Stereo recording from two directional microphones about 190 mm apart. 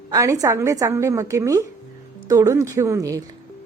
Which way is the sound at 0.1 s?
15° right (ahead or behind).